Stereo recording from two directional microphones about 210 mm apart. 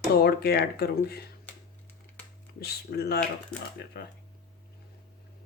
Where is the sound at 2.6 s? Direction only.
50° left (ahead or behind).